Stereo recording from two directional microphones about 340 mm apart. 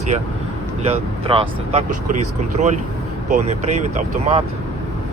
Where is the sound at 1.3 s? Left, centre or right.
Centre.